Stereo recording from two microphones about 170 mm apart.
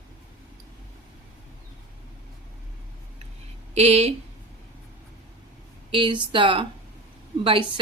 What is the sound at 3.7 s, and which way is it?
Speech, 35° right (ahead or behind).